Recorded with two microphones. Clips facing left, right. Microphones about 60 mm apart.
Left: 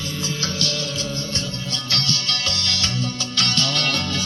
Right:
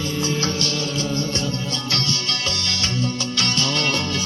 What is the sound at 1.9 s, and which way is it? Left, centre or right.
Music, right.